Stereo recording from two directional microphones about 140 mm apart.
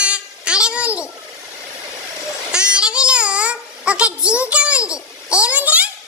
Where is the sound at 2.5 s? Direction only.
5° right (ahead or behind).